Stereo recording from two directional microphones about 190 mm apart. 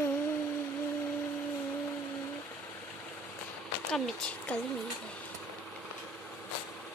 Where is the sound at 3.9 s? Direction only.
Centre (ahead or behind).